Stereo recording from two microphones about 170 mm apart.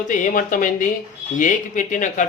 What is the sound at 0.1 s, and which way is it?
Speech, 50° left (ahead or behind).